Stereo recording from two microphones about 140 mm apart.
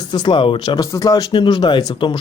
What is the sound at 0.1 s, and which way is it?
A man's voice, 30° left (ahead or behind).